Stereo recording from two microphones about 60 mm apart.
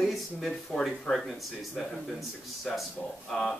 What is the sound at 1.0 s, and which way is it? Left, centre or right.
Speech, centre.